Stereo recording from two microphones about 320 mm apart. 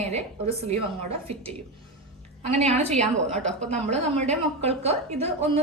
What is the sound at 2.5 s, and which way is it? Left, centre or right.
Speech, centre.